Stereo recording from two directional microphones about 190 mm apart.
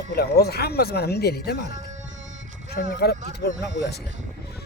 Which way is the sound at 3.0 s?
55° left (ahead or behind).